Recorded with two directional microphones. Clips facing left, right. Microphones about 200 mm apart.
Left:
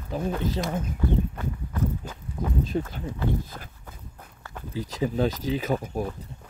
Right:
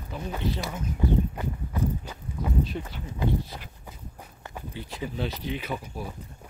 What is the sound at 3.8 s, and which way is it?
Walk, 10° right (ahead or behind).